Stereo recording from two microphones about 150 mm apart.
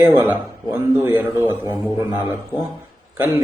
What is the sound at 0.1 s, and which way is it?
Speech, 15° right (ahead or behind).